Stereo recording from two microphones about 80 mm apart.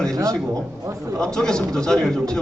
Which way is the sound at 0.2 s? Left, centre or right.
Right.